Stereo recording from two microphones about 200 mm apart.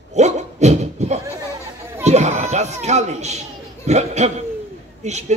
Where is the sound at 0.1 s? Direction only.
35° right (ahead or behind).